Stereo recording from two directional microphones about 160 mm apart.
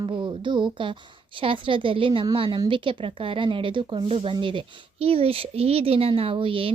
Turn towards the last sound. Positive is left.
turn(degrees=-35)  # may be behind; listen again after turning